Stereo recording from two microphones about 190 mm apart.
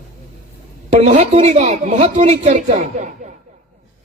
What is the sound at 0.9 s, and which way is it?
A man's voice, 35° right (ahead or behind).